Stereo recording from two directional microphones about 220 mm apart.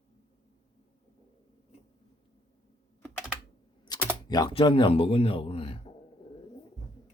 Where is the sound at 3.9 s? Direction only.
20° left (ahead or behind).